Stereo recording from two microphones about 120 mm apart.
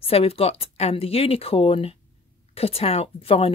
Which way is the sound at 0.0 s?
55° left (ahead or behind).